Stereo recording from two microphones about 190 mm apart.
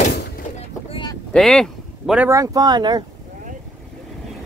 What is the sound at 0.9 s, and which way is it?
Boat, 25° left (ahead or behind).